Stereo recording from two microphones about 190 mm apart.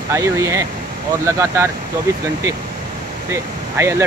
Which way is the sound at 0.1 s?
15° right (ahead or behind).